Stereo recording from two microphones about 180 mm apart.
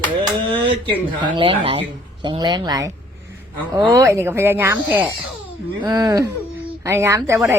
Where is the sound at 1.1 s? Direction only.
25° right (ahead or behind).